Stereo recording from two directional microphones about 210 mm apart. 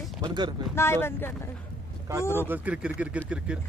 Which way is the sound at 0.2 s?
20° right (ahead or behind).